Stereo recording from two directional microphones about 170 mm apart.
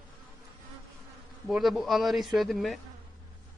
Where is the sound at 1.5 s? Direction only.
Centre (ahead or behind).